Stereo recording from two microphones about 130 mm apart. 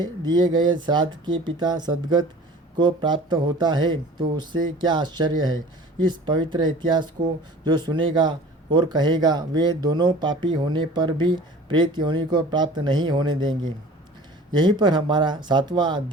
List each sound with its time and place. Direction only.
0.0 s speech: 35° right (ahead or behind)